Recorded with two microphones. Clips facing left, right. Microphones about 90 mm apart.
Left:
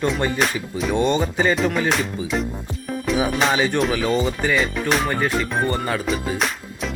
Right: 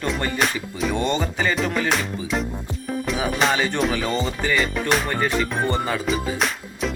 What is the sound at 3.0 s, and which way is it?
Music, centre (ahead or behind).